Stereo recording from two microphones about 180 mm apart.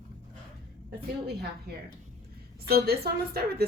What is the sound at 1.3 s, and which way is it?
Speech, 65° right (ahead or behind).